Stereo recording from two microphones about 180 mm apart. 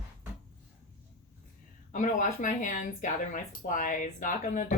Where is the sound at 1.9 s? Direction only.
45° left (ahead or behind).